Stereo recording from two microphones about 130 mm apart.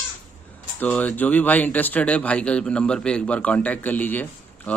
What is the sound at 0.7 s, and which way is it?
Speech, 10° left (ahead or behind).